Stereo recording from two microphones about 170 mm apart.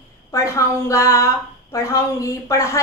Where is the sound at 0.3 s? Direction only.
15° left (ahead or behind).